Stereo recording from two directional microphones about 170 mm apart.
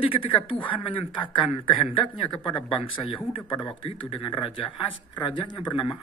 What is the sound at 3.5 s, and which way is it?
Speech, 30° left (ahead or behind).